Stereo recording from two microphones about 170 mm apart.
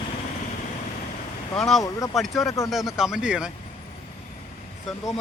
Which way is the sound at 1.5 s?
Centre (ahead or behind).